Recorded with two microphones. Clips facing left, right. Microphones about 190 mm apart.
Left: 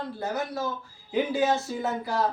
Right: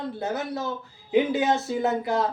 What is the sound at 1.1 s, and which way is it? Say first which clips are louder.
Speech: right 3 dB; 20° right (ahead or behind).